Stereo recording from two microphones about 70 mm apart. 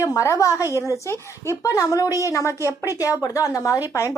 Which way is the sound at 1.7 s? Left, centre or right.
Left.